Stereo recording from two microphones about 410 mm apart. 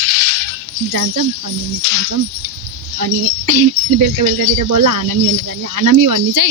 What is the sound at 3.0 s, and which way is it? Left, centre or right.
Speech, right.